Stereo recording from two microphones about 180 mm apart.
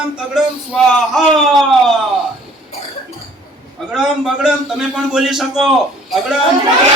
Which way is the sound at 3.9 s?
5° right (ahead or behind).